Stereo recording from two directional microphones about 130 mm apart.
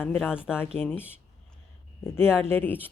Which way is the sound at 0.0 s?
15° left (ahead or behind).